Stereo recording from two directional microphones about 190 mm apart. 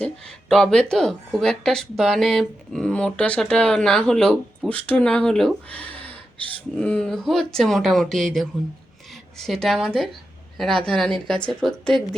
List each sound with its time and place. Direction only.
0.0 s speech: 5° left (ahead or behind)